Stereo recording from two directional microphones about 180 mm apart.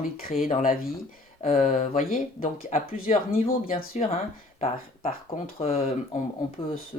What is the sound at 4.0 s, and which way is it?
Speech, 40° left (ahead or behind).